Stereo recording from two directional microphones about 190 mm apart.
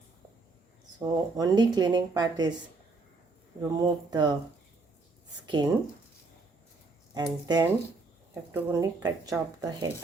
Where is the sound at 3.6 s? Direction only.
20° right (ahead or behind).